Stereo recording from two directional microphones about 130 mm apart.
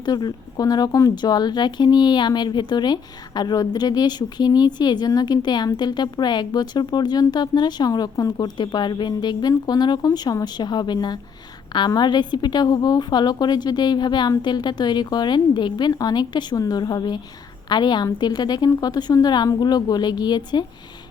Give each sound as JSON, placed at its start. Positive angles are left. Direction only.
{"t": 0.0, "sound": "speech", "side_deg": 30}